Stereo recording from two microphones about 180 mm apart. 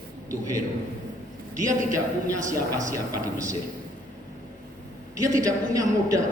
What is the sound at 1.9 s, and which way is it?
A man's voice, 15° right (ahead or behind).